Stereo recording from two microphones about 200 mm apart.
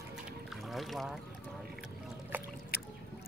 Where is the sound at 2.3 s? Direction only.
10° right (ahead or behind).